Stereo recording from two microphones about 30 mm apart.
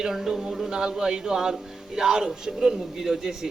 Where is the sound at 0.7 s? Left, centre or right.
Right.